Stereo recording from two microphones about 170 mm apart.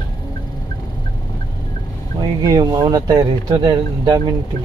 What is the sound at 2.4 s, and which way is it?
Speech, 20° right (ahead or behind).